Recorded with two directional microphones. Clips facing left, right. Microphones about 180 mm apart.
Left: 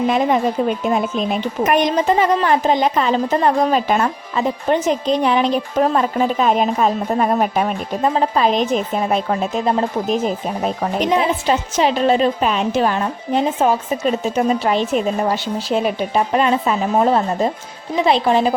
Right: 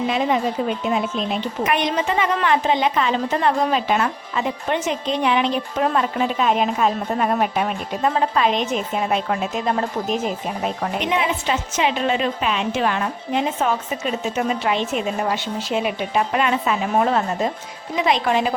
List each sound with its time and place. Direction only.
0.1 s a woman's voice: 50° left (ahead or behind)